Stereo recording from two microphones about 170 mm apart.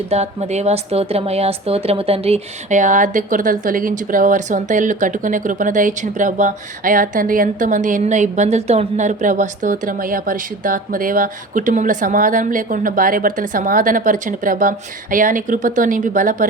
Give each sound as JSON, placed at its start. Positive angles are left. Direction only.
{"t": 0.1, "sound": "a woman's voice", "side_deg": -40}